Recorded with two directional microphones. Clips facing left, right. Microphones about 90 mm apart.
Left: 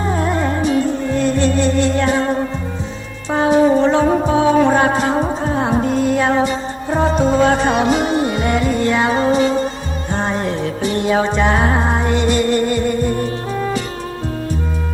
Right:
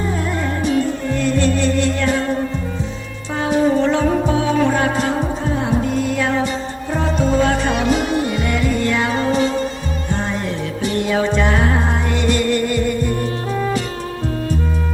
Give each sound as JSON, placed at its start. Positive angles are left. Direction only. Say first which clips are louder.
{"t": 0.1, "sound": "music", "louder": "left 4 dB", "side_deg": 35}
{"t": 1.2, "sound": "music", "louder": "left 1 dB", "side_deg": 20}
{"t": 10.1, "sound": "music", "louder": "left 4 dB", "side_deg": 35}